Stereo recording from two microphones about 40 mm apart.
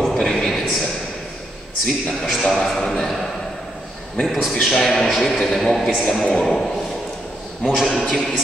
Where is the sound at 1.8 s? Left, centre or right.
Centre.